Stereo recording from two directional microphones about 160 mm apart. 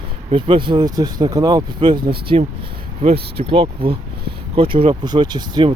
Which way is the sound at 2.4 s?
45° right (ahead or behind).